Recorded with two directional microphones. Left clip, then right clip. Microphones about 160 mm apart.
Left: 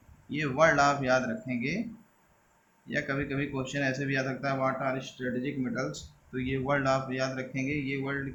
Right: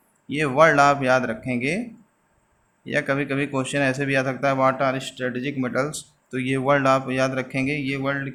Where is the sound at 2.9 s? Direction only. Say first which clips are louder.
Right 9 dB; 50° right (ahead or behind).